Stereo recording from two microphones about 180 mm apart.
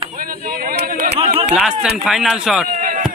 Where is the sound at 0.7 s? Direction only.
65° right (ahead or behind).